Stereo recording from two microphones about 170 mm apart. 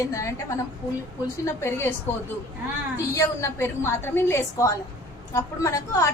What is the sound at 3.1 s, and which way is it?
A woman's voice, 15° left (ahead or behind).